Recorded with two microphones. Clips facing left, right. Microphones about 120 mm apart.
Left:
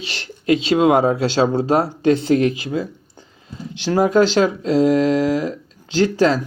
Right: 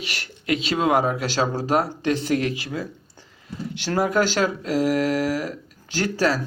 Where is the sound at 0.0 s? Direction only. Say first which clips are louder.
Left 6 dB; 25° left (ahead or behind).